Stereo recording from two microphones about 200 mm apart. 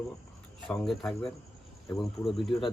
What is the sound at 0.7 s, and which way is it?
Speech, 5° left (ahead or behind).